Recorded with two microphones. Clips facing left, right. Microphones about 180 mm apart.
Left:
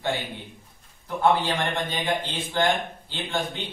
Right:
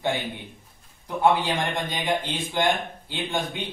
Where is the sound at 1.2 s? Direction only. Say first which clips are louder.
Right 1 dB; 15° right (ahead or behind).